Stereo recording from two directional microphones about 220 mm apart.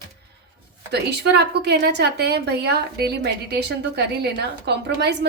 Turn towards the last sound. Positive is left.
turn(degrees=-50)  # may be behind; listen again after turning